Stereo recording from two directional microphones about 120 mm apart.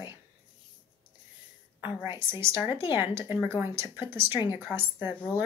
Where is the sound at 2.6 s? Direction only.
40° left (ahead or behind).